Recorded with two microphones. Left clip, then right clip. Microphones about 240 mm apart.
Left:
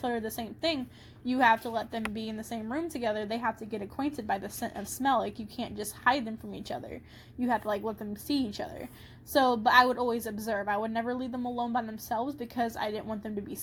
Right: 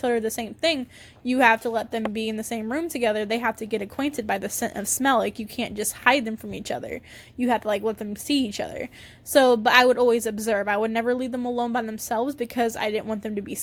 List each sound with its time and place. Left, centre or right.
0.0 s a woman's voice: right